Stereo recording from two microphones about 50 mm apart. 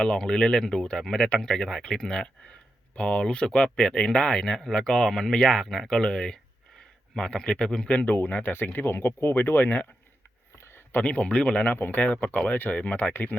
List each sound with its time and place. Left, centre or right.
0.0 s speech: centre
5.6 s speech: centre
5.9 s a sound: centre
7.2 s speech: centre
8.0 s speech: left
10.5 s a sound: left
10.9 s speech: left